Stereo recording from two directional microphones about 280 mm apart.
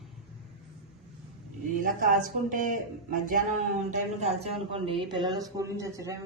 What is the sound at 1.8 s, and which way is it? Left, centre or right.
A woman's voice, right.